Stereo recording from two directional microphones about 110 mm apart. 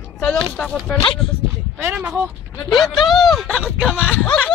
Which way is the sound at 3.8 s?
10° right (ahead or behind).